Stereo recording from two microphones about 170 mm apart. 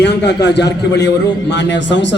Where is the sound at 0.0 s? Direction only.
80° left.